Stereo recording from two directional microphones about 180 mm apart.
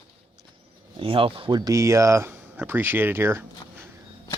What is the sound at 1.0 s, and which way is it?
Speech, 30° right (ahead or behind).